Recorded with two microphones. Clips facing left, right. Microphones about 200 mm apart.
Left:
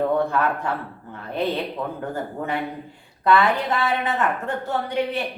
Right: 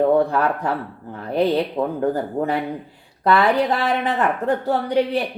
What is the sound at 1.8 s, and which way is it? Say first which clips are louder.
Speech: right 7 dB; 30° right (ahead or behind).